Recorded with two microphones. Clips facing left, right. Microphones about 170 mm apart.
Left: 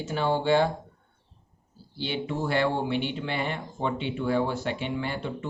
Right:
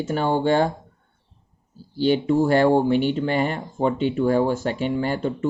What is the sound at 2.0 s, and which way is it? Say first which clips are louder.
Speech: right 11 dB; 45° right (ahead or behind).